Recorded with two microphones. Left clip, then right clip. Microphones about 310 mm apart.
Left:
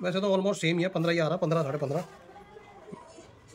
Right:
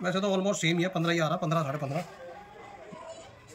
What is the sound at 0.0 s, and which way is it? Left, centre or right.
Speech, centre.